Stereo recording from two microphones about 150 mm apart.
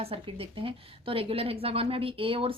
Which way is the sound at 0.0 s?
40° right (ahead or behind).